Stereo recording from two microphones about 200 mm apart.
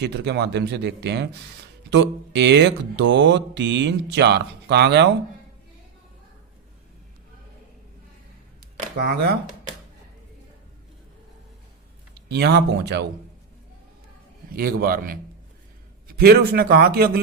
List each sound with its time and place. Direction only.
0.0 s speech: 60° right (ahead or behind)
9.0 s speech: 55° right (ahead or behind)
12.1 s a man's voice: 55° right (ahead or behind)
14.5 s a man's voice: 45° right (ahead or behind)